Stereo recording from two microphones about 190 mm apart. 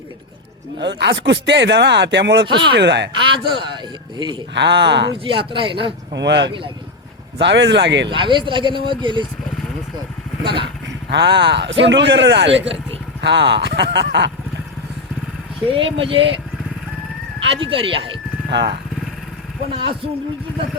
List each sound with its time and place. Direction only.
0.8 s speech: 65° right (ahead or behind)
2.5 s speech: 25° right (ahead or behind)
2.7 s speech: 65° right (ahead or behind)
3.1 s speech: 25° right (ahead or behind)
4.5 s speech: 65° right (ahead or behind)
5.1 s speech: 25° right (ahead or behind)
6.1 s speech: 65° right (ahead or behind)
8.0 s speech: 25° right (ahead or behind)
10.4 s speech: 25° right (ahead or behind)
10.8 s speech: 65° right (ahead or behind)
15.7 s speech: 30° right (ahead or behind)
17.4 s speech: 30° right (ahead or behind)
18.5 s speech: 60° right (ahead or behind)